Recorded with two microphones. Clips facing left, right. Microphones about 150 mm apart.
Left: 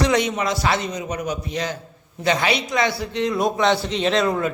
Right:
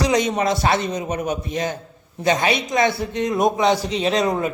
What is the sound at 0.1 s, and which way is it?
A woman's voice, 30° right (ahead or behind).